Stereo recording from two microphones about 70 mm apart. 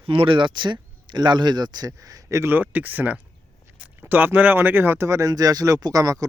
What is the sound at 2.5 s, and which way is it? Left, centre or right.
A man's voice, right.